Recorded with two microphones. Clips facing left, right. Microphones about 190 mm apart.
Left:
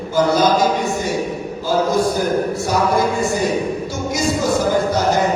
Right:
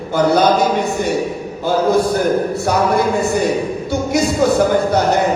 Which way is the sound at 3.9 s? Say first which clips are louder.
Right 4 dB; 60° right (ahead or behind).